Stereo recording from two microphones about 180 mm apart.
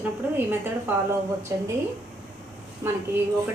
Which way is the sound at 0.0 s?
10° right (ahead or behind).